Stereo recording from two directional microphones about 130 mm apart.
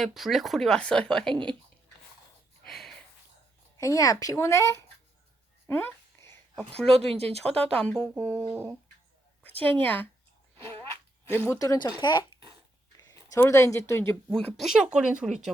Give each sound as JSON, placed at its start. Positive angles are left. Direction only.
{"t": 0.0, "sound": "speech", "side_deg": 0}
{"t": 2.6, "sound": "a sound", "side_deg": 0}
{"t": 3.8, "sound": "speech", "side_deg": 25}
{"t": 5.6, "sound": "a sound", "side_deg": 20}
{"t": 6.7, "sound": "speech", "side_deg": 5}
{"t": 9.8, "sound": "speech", "side_deg": 15}
{"t": 11.3, "sound": "speech", "side_deg": 15}
{"t": 11.6, "sound": "speech", "side_deg": 30}
{"t": 13.0, "sound": "a sound", "side_deg": 30}
{"t": 13.3, "sound": "speech", "side_deg": 25}
{"t": 14.3, "sound": "speech", "side_deg": 5}